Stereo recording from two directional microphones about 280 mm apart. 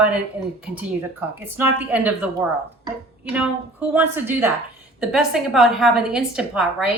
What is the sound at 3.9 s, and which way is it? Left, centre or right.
A woman's voice, centre.